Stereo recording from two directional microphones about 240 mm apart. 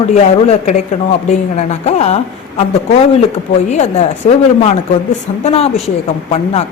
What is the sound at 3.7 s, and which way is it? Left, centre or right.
A woman's voice, left.